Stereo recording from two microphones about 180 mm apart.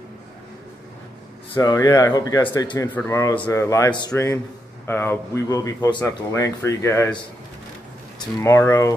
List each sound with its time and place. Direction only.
1.5 s a man's voice: 20° left (ahead or behind)
8.2 s a man's voice: 20° left (ahead or behind)